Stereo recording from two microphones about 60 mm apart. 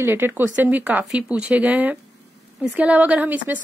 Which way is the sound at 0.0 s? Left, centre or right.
Right.